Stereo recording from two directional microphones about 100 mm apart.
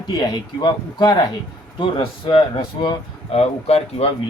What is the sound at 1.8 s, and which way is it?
Speech, 55° left (ahead or behind).